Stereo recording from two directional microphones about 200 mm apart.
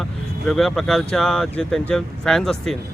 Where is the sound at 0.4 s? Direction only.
Centre (ahead or behind).